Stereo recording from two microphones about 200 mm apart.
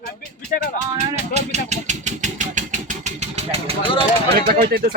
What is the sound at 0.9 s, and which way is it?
Speech, 35° right (ahead or behind).